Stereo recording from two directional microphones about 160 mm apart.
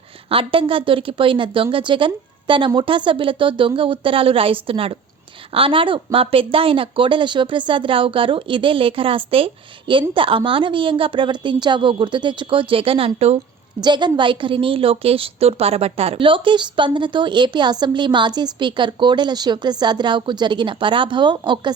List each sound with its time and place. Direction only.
0.3 s speech: 35° right (ahead or behind)
13.8 s a woman's voice: 30° right (ahead or behind)